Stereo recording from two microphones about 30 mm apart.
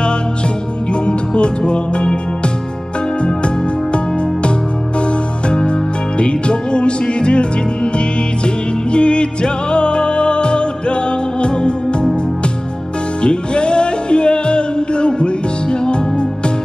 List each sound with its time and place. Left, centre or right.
1.0 s music: left
3.2 s music: left
6.1 s music: left
8.9 s music: left
13.2 s music: left